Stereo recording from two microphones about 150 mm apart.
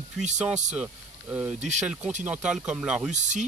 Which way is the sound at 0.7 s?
10° right (ahead or behind).